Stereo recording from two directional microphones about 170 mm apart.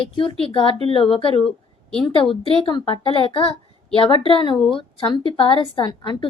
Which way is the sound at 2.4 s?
30° left (ahead or behind).